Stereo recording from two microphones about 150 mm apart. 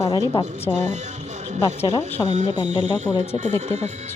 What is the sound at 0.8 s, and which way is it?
Speech, 50° right (ahead or behind).